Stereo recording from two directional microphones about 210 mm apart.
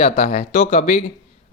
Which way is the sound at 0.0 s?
35° left (ahead or behind).